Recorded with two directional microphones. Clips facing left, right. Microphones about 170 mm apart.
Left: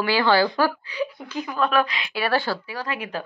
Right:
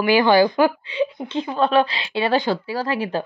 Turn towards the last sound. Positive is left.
turn(degrees=-30)  # may be behind; listen again after turning